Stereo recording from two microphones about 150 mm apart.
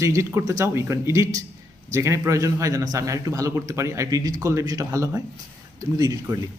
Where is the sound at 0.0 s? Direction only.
20° right (ahead or behind).